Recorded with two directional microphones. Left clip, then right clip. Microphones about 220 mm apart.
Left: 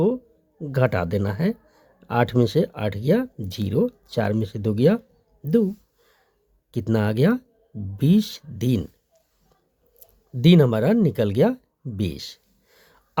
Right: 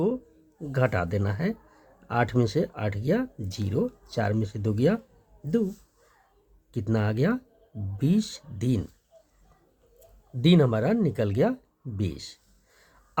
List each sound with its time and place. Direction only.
0.7 s speech: 35° left (ahead or behind)
6.7 s speech: 40° left (ahead or behind)
10.4 s speech: 40° left (ahead or behind)